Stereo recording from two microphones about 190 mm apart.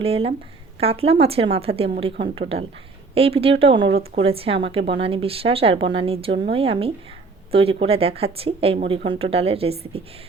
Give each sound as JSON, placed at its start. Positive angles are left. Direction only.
{"t": 0.0, "sound": "speech", "side_deg": -30}
{"t": 3.2, "sound": "speech", "side_deg": -30}